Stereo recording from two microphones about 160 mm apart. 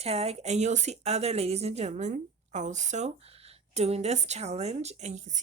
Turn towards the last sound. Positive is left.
turn(degrees=-45)  # may be behind; listen again after turning